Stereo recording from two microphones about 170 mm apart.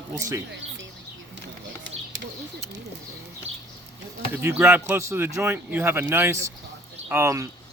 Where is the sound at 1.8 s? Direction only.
90° right.